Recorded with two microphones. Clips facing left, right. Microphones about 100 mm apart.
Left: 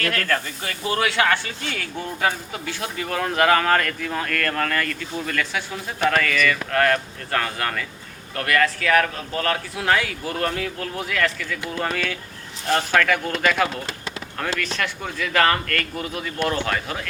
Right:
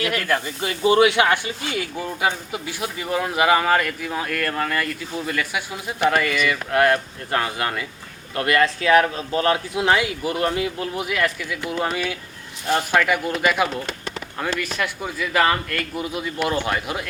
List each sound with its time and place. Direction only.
0.0 s speech: 10° right (ahead or behind)